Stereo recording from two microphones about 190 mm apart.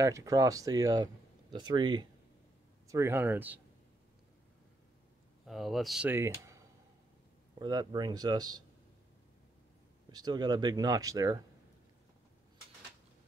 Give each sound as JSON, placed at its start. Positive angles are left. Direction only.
{"t": 0.0, "sound": "speech", "side_deg": -15}
{"t": 5.5, "sound": "speech", "side_deg": 0}
{"t": 10.1, "sound": "speech", "side_deg": -20}